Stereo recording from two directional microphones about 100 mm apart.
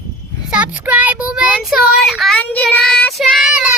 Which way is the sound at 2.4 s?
15° left (ahead or behind).